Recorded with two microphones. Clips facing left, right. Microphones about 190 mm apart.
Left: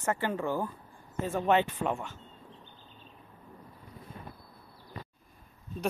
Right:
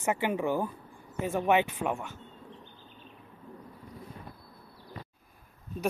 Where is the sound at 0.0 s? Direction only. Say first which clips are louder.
Right 2 dB; 15° right (ahead or behind).